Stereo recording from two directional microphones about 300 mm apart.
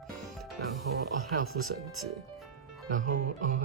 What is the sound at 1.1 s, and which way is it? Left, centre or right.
Speech, right.